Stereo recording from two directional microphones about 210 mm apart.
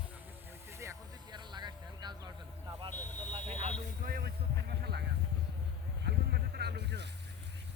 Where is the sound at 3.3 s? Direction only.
30° right (ahead or behind); by 5.0 s 50° right (ahead or behind).